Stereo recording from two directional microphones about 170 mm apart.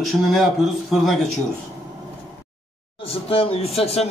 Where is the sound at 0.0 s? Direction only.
Centre (ahead or behind).